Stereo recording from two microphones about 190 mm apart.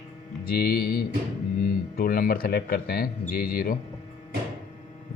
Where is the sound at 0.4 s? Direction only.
50° left (ahead or behind).